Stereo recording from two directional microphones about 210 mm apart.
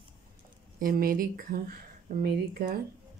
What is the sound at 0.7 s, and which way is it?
Speech, 45° right (ahead or behind).